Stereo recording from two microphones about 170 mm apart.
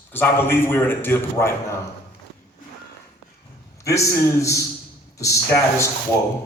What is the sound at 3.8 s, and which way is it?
A man's voice, 20° left (ahead or behind).